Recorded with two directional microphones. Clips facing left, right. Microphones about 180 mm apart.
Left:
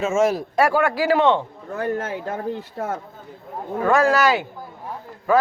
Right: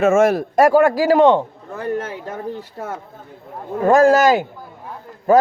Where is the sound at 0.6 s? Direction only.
45° right (ahead or behind).